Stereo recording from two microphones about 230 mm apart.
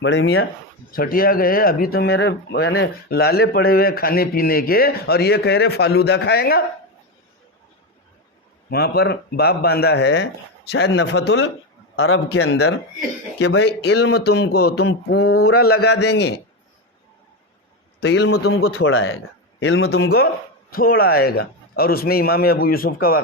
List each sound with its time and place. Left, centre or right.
0.0 s speech: left
8.7 s speech: left
11.9 s a man's voice: left
13.4 s speech: left
18.0 s speech: left
18.6 s a man's voice: left